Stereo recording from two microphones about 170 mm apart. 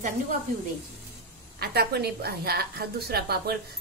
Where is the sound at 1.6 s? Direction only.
70° right (ahead or behind).